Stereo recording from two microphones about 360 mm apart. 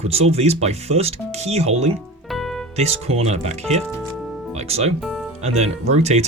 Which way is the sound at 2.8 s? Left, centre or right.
Centre.